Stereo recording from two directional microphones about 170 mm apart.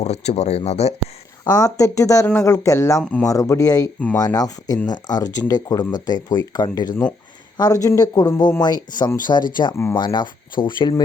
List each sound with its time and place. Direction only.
0.0 s speech: 40° left (ahead or behind)
1.5 s speech: 20° left (ahead or behind)
3.0 s speech: 5° left (ahead or behind)
3.2 s speech: 20° left (ahead or behind)